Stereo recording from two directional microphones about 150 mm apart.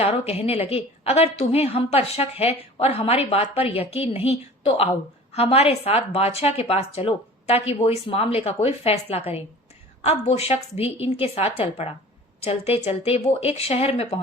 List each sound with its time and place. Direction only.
0.0 s a woman's voice: 40° left (ahead or behind)